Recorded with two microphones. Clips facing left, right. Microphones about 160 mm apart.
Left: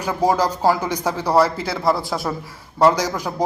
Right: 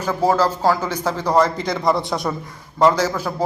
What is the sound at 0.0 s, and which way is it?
Speech, 10° left (ahead or behind).